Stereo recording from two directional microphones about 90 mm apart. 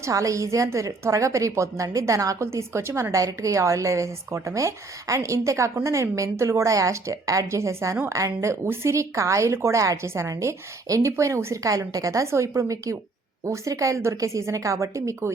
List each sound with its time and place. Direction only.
0.0 s speech: 40° right (ahead or behind)